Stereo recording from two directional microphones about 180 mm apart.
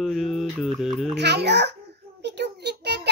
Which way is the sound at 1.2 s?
70° right (ahead or behind).